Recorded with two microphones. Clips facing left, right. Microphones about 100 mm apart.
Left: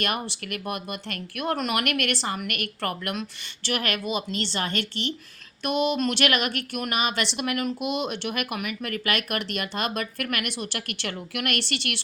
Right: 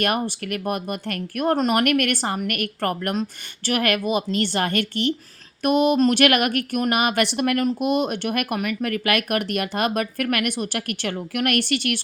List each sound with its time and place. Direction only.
0.0 s a woman's voice: 50° right (ahead or behind)